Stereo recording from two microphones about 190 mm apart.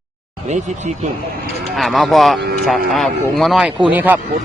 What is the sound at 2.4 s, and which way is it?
Speech, 55° right (ahead or behind).